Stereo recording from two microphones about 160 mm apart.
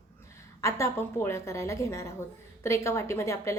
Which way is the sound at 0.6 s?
20° left (ahead or behind).